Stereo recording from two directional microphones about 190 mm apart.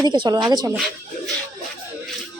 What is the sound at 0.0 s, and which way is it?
Speech, 20° right (ahead or behind).